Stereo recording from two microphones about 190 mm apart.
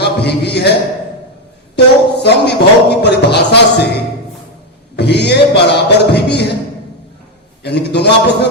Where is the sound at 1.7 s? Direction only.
60° left (ahead or behind).